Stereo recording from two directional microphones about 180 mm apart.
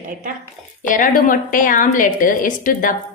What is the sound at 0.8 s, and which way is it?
A woman's voice, 45° left (ahead or behind).